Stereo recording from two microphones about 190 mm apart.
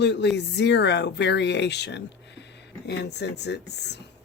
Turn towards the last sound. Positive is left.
turn(degrees=60)  # may be behind; listen again after turning